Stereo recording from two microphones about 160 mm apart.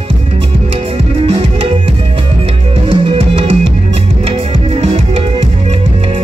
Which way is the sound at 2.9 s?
35° right (ahead or behind).